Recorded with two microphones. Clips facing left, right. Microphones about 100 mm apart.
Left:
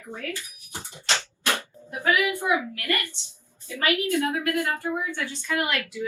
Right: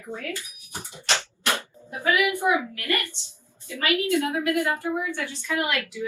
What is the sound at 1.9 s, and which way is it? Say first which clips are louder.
Speech: even; 15° left (ahead or behind).